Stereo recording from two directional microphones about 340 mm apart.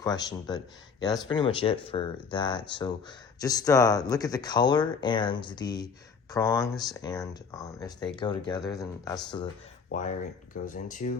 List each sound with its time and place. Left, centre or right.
0.0 s speech: centre